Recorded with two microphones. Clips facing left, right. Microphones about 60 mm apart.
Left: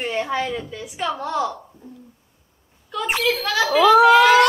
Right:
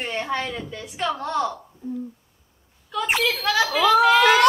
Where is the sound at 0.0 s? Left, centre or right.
Centre.